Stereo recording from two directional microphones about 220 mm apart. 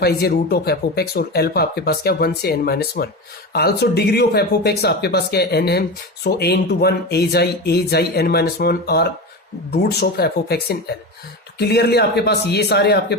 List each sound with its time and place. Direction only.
0.0 s speech: 45° left (ahead or behind)